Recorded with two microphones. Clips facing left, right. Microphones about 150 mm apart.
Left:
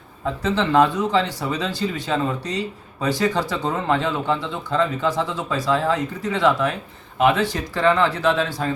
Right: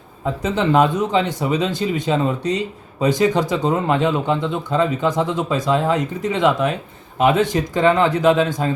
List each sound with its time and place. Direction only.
0.4 s speech: 15° right (ahead or behind)